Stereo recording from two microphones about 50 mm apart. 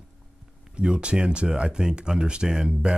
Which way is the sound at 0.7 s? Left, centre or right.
Centre.